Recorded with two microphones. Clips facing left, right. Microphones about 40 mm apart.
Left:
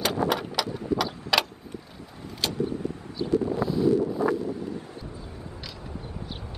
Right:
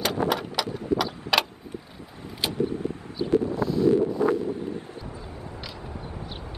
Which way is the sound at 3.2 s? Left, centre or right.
Centre.